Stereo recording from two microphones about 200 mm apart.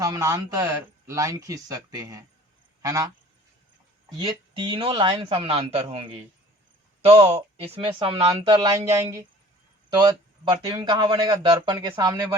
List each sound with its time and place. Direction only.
0.0 s speech: 15° right (ahead or behind)
4.3 s speech: 25° right (ahead or behind)